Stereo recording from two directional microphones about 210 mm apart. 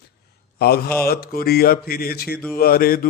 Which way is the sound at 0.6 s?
45° left (ahead or behind).